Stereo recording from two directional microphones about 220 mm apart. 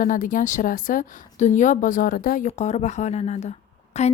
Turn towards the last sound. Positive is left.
turn(degrees=30)  # may be behind; listen again after turning